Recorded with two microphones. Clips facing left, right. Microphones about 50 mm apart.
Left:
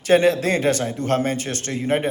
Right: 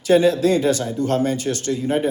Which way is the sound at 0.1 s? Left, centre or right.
Left.